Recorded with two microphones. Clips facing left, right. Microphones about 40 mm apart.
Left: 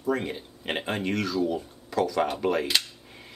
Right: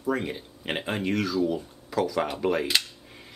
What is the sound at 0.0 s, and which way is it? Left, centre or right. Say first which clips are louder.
Speech: even; centre.